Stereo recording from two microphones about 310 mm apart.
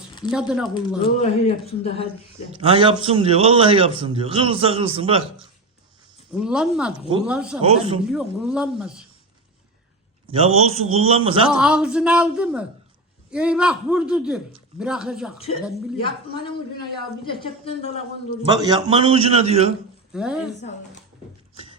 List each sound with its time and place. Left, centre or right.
0.3 s a man's voice: centre
1.2 s a man's voice: centre
2.6 s a man's voice: centre
6.3 s a man's voice: centre
7.6 s a man's voice: centre
8.1 s a man's voice: centre
10.2 s a man's voice: centre
11.6 s a man's voice: centre
15.4 s a man's voice: centre
18.4 s a man's voice: centre
20.1 s a man's voice: centre